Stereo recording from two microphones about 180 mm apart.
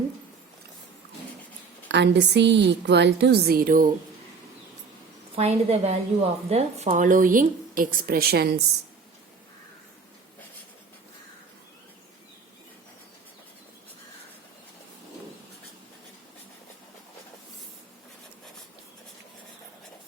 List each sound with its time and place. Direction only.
1.9 s speech: 70° right (ahead or behind); by 3.8 s 50° right (ahead or behind)
5.3 s a woman's voice: 35° right (ahead or behind); by 8.6 s 60° right (ahead or behind)